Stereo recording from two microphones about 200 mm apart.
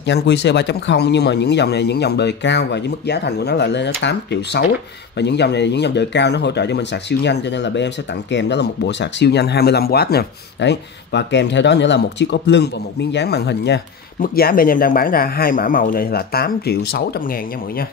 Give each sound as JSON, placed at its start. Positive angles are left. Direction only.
{"t": 0.0, "sound": "speech", "side_deg": 60}
{"t": 14.2, "sound": "speech", "side_deg": 45}